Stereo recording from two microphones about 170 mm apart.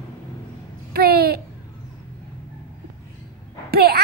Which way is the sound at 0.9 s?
65° right (ahead or behind).